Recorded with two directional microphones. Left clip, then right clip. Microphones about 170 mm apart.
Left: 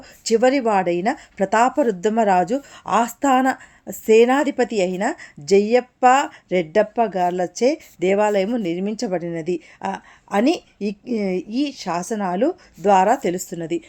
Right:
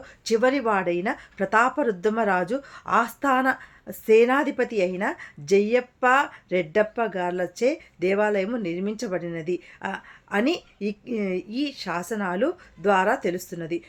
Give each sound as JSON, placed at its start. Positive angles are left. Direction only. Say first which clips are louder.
{"t": 0.3, "sound": "speech", "louder": "left 5 dB", "side_deg": 30}